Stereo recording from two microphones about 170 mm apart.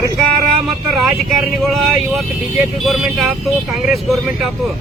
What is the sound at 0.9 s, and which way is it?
Speech, centre (ahead or behind).